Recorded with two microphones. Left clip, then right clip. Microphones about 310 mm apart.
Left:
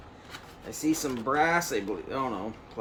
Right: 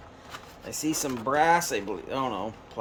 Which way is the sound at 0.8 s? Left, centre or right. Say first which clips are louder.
Left 1 dB; right.